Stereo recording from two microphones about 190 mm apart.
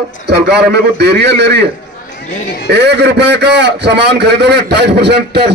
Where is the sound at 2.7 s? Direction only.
65° right (ahead or behind).